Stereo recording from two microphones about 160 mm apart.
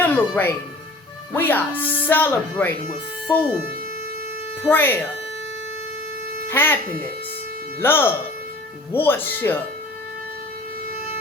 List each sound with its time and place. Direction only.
0.0 s speech: 15° left (ahead or behind)
4.7 s speech: 10° left (ahead or behind)
6.5 s speech: 10° left (ahead or behind)
7.8 s speech: 15° left (ahead or behind)